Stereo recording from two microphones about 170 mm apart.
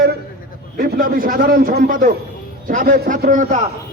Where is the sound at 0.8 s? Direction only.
55° right (ahead or behind).